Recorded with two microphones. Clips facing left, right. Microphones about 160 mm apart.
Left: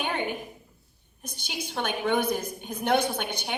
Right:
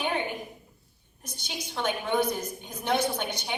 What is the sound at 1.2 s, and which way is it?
A woman's voice, 60° left (ahead or behind).